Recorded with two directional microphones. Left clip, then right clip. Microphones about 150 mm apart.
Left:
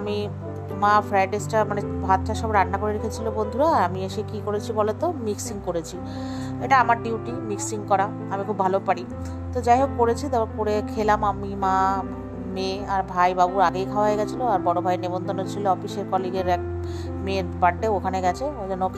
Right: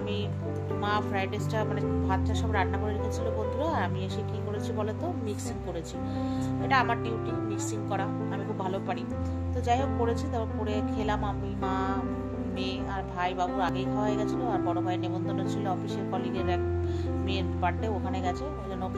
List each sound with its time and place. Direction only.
0.7 s speech: 50° left (ahead or behind)